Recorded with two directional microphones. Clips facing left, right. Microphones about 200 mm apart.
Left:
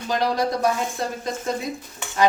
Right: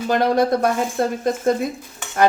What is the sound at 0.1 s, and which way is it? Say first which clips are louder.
Speech: right 5 dB; 55° right (ahead or behind).